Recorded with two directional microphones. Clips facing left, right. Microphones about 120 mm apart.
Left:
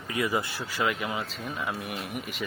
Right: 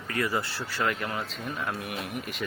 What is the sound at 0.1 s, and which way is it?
Speech, 15° left (ahead or behind).